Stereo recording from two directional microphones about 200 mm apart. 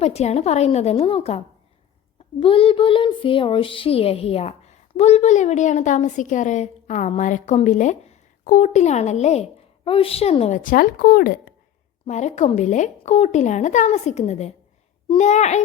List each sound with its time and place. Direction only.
0.0 s a child's voice: 30° left (ahead or behind)
2.4 s a child's voice: 25° left (ahead or behind); by 11.5 s 50° left (ahead or behind)
12.0 s a child's voice: 35° left (ahead or behind)